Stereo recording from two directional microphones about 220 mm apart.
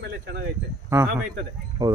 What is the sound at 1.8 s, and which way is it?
Speech, 15° right (ahead or behind).